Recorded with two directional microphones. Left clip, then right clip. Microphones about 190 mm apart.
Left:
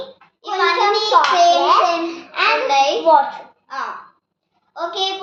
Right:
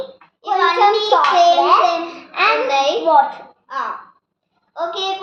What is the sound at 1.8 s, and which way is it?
Babbling, centre (ahead or behind).